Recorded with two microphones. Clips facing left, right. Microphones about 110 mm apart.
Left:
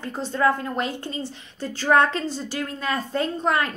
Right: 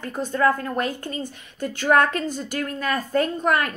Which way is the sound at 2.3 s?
50° right (ahead or behind).